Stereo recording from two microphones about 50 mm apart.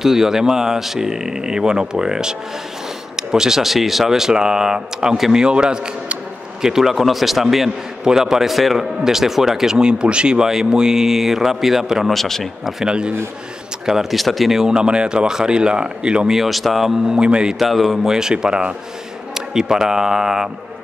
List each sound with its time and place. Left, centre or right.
0.0 s a man's voice: centre
5.4 s a man's voice: centre
6.6 s a man's voice: centre
12.2 s a man's voice: centre
12.8 s a man's voice: centre
16.3 s a man's voice: centre
17.2 s a man's voice: centre
17.6 s speech: centre
18.1 s a man's voice: centre